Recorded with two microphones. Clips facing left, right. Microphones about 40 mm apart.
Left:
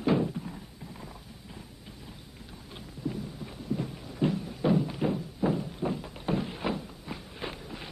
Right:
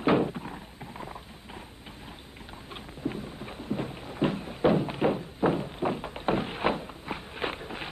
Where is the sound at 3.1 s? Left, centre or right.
Right.